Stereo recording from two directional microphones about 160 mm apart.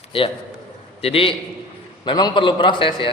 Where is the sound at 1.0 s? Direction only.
35° left (ahead or behind).